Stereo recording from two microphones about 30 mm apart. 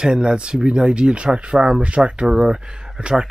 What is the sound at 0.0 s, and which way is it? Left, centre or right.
Speech, right.